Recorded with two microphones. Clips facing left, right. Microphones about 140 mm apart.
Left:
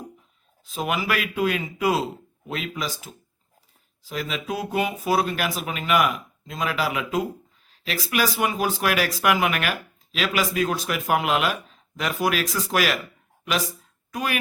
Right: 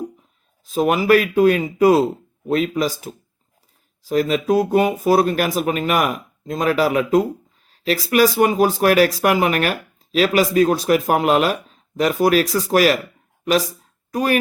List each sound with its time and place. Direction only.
0.6 s speech: 40° right (ahead or behind)
14.1 s speech: 40° right (ahead or behind)